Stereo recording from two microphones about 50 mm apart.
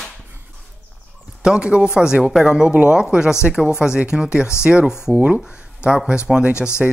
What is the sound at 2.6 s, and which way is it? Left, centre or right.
Speech, right.